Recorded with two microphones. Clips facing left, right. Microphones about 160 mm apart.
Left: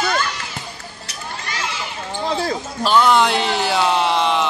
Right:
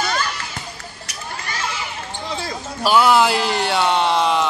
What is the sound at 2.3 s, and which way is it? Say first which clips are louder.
Speech: left 7 dB; 60° left (ahead or behind).